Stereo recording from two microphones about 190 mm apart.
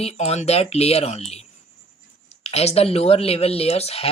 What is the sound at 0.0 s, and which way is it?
Speech, 35° left (ahead or behind).